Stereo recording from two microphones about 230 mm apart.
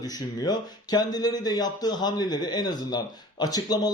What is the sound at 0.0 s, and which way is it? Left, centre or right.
Speech, centre.